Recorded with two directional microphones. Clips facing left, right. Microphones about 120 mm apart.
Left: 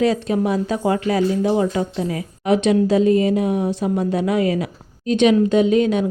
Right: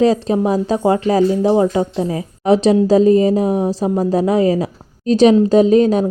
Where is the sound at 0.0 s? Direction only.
35° right (ahead or behind).